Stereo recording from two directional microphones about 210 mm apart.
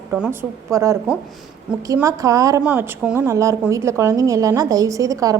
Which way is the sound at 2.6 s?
5° right (ahead or behind).